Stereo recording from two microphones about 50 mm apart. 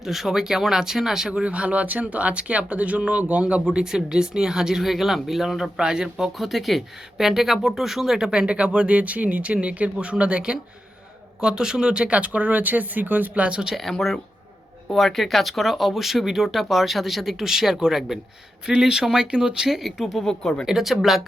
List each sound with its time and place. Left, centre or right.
0.0 s speech: centre
1.3 s speech: right; by 5.7 s centre
5.7 s speech: centre
12.2 s speech: right
13.9 s speech: centre
20.1 s speech: centre
20.7 s speech: centre